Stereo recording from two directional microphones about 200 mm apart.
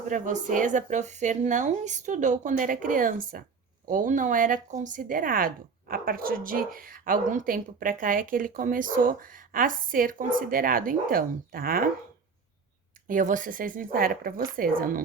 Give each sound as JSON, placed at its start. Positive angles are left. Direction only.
{"t": 0.1, "sound": "speech", "side_deg": -40}
{"t": 13.1, "sound": "speech", "side_deg": -40}